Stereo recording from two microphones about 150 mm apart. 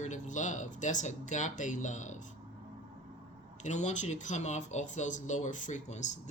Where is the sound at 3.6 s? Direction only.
50° left (ahead or behind).